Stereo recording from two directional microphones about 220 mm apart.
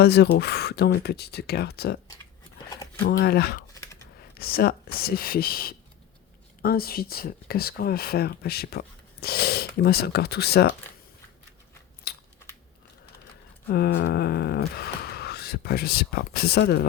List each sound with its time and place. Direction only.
0.0 s speech: 45° left (ahead or behind)
3.0 s speech: 45° left (ahead or behind)
12.1 s scissors: 45° left (ahead or behind)
13.7 s speech: 45° left (ahead or behind)